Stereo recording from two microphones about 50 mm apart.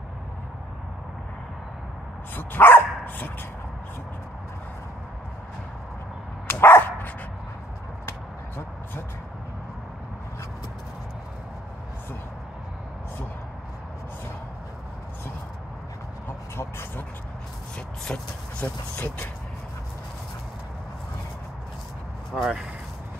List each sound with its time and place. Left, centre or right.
2.3 s dog: left
6.4 s dog: left
16.3 s vehicle: left
17.7 s vehicle: centre
18.9 s speech: left
22.3 s speech: centre